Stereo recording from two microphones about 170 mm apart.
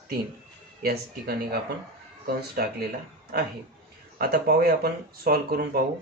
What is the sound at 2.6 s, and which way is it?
Speech, 55° right (ahead or behind).